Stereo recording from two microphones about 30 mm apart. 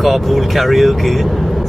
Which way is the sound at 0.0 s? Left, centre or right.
Centre.